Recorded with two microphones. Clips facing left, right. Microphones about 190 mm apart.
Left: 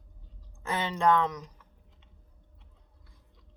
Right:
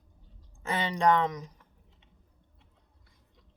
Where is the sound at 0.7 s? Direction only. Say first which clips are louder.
Even; 15° right (ahead or behind).